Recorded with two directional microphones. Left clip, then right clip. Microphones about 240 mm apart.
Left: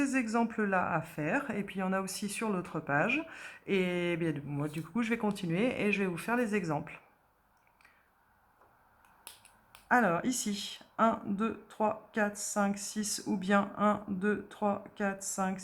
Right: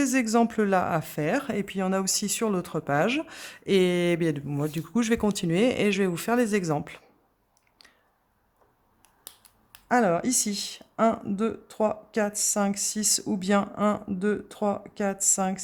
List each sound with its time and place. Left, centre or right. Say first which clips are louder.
0.0 s speech: right 7 dB; right
4.1 s speech: right 8 dB; right
4.9 s speech: right 8 dB; right
6.0 s speech: right 7 dB; right
9.9 s speech: right 5 dB; right